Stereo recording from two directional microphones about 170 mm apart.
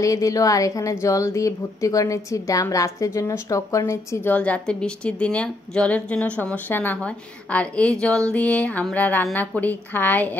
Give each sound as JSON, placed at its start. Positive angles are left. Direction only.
{"t": 0.0, "sound": "a woman's voice", "side_deg": 20}